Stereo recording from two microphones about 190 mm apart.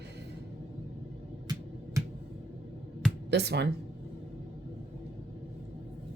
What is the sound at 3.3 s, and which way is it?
Speech, 60° right (ahead or behind).